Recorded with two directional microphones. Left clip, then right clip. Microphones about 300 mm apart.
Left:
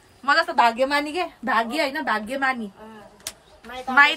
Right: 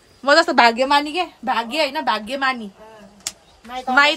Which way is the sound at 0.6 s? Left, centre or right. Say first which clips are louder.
Right 4 dB; right.